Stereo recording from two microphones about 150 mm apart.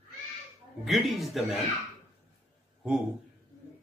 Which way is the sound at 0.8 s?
Centre (ahead or behind).